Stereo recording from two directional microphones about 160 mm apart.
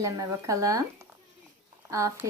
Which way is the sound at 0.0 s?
20° right (ahead or behind).